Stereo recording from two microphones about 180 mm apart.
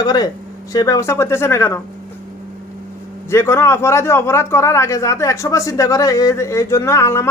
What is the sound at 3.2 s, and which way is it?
A man's voice, 15° left (ahead or behind).